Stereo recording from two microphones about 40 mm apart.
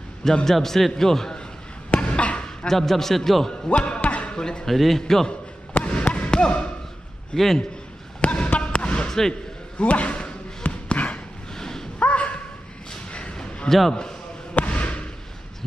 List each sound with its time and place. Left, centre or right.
0.2 s a man's voice: centre
1.9 s basketball bounce: left
2.7 s a man's voice: centre
3.6 s music: left
4.3 s speech: left
4.6 s a man's voice: centre
5.9 s basketball bounce: left
7.3 s a man's voice: centre
8.2 s basketball bounce: left
11.5 s a sound: centre
12.0 s a sound: left
13.7 s a man's voice: centre
14.5 s basketball bounce: left